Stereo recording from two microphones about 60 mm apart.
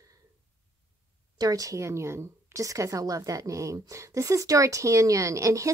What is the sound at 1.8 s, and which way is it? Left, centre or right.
A woman's voice, right.